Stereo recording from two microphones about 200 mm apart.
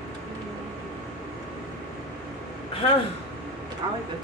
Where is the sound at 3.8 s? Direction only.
25° right (ahead or behind).